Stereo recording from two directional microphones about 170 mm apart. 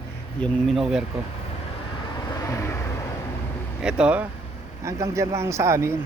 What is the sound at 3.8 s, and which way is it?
Speech, 5° right (ahead or behind).